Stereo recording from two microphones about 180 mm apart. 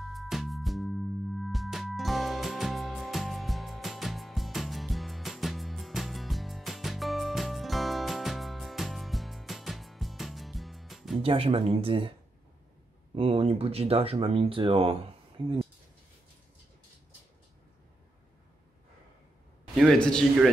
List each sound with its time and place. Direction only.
0.0 s music: centre (ahead or behind)
11.2 s speech: 30° right (ahead or behind)
13.1 s speech: 30° right (ahead or behind)
19.8 s a man's voice: 5° left (ahead or behind)